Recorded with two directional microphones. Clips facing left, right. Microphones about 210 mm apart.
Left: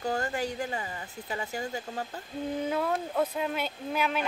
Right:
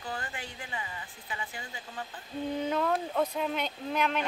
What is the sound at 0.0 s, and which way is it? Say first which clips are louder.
Speech: left 9 dB; 45° left (ahead or behind).